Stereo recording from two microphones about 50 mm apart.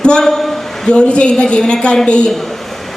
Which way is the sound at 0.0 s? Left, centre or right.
Centre.